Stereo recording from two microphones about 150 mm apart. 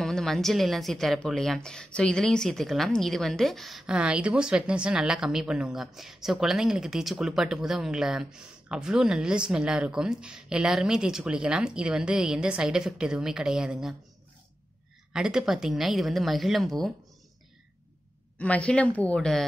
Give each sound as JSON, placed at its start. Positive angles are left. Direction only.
{"t": 0.0, "sound": "speech", "side_deg": 5}
{"t": 15.1, "sound": "speech", "side_deg": -5}
{"t": 18.4, "sound": "speech", "side_deg": 10}